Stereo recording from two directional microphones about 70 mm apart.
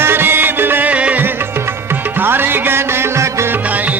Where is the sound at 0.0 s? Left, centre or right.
Right.